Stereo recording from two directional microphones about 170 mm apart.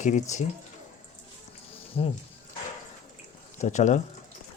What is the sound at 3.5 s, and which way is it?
Speech, 45° left (ahead or behind).